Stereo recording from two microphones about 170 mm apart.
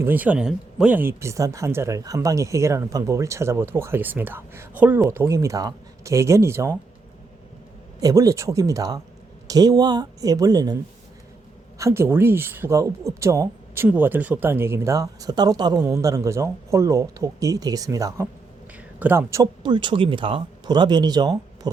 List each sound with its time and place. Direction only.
0.0 s speech: 10° right (ahead or behind)
8.0 s speech: 20° right (ahead or behind)
11.8 s speech: 15° right (ahead or behind)
19.4 s speech: 25° right (ahead or behind)